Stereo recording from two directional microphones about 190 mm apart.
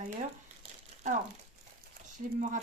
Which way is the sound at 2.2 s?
40° right (ahead or behind).